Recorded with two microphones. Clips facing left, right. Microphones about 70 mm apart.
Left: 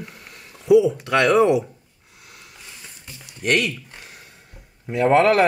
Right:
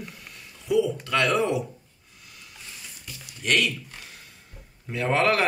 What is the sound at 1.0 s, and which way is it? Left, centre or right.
Speech, left.